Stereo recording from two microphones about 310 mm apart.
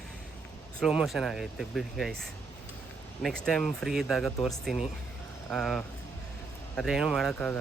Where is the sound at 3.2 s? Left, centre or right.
Centre.